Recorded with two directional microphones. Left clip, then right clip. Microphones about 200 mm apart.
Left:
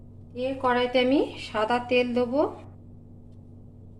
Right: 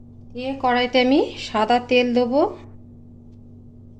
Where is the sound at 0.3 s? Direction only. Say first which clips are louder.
Right 4 dB; 50° right (ahead or behind).